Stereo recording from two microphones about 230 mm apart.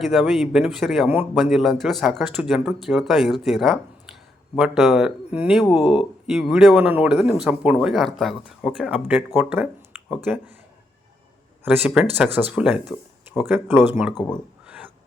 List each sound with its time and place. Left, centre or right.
0.0 s speech: centre
11.6 s speech: centre
14.1 s speech: centre